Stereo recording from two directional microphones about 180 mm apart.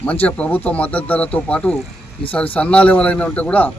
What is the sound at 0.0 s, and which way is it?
A man's voice, 10° left (ahead or behind).